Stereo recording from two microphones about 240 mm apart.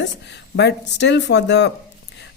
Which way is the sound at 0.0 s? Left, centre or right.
Left.